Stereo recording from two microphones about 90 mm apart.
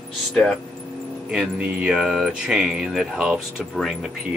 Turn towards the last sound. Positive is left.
turn(degrees=-5)  # may be behind; listen again after turning